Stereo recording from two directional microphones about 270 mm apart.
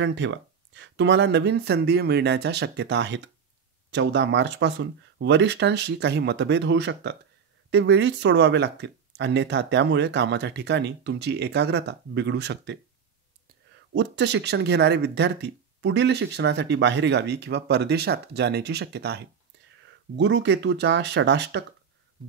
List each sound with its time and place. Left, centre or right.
0.0 s speech: right
13.9 s speech: right